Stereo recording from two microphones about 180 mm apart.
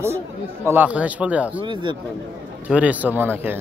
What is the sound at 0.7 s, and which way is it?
Speech, 10° right (ahead or behind).